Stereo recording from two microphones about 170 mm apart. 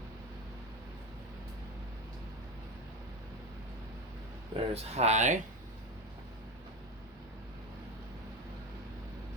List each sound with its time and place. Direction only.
4.5 s speech: 40° right (ahead or behind)